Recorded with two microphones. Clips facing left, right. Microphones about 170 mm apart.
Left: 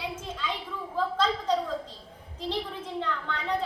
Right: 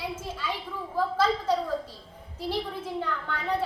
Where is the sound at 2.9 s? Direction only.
10° right (ahead or behind).